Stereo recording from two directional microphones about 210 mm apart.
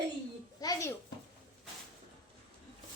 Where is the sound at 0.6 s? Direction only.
15° left (ahead or behind).